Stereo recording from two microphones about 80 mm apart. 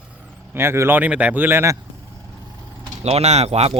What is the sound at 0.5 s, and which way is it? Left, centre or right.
A man's voice, right.